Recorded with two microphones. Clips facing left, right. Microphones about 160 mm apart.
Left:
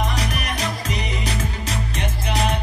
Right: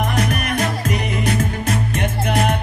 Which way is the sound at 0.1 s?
50° right (ahead or behind).